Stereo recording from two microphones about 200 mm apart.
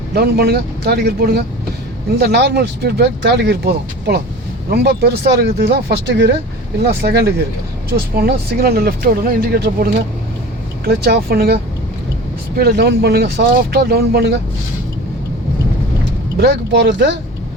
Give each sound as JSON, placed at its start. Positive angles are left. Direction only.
{"t": 0.1, "sound": "speech", "side_deg": -55}
{"t": 16.4, "sound": "speech", "side_deg": -60}